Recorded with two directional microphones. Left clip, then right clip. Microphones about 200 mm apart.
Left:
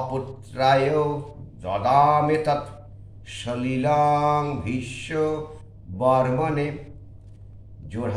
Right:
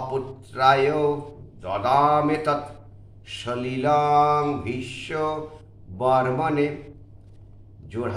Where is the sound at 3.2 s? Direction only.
15° right (ahead or behind).